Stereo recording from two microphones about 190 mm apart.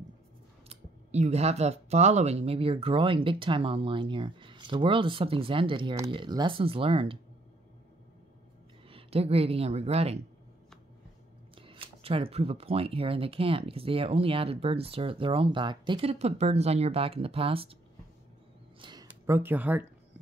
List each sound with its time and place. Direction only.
0.7 s speech: 35° right (ahead or behind)
8.8 s a woman's voice: 30° right (ahead or behind)
11.5 s speech: 25° right (ahead or behind)
18.8 s speech: 20° right (ahead or behind)